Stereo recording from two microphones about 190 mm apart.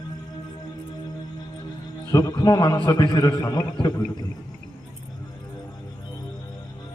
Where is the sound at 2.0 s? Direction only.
15° left (ahead or behind).